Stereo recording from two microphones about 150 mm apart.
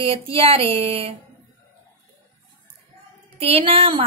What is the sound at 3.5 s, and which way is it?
Speech, 40° right (ahead or behind).